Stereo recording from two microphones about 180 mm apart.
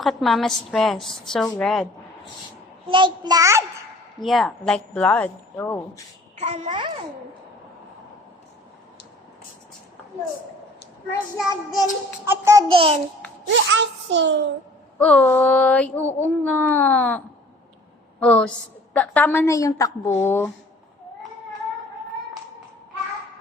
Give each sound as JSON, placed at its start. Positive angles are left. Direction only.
{"t": 0.0, "sound": "a woman's voice", "side_deg": 0}
{"t": 2.9, "sound": "a child's voice", "side_deg": -25}
{"t": 4.2, "sound": "a sound", "side_deg": 0}
{"t": 6.4, "sound": "a child's voice", "side_deg": -30}
{"t": 11.3, "sound": "a woman's voice", "side_deg": 0}
{"t": 12.2, "sound": "a child's voice", "side_deg": -15}
{"t": 12.7, "sound": "a child's voice", "side_deg": -30}
{"t": 13.5, "sound": "a child's voice", "side_deg": -85}
{"t": 14.9, "sound": "a sound", "side_deg": 5}
{"t": 18.2, "sound": "a woman's voice", "side_deg": 5}
{"t": 18.9, "sound": "a sound", "side_deg": 10}